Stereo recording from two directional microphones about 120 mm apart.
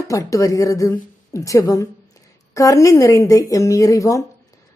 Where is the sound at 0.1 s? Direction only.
25° left (ahead or behind).